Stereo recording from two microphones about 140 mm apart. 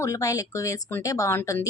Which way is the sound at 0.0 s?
25° left (ahead or behind).